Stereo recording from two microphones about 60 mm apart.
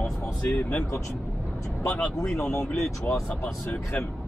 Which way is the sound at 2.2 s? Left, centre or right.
Centre.